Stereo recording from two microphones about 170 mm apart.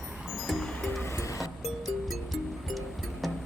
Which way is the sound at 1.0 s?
15° left (ahead or behind).